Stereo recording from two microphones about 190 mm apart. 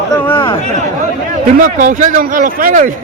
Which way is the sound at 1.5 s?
45° right (ahead or behind).